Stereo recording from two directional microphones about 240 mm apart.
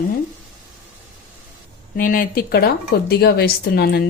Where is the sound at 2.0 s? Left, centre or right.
Left.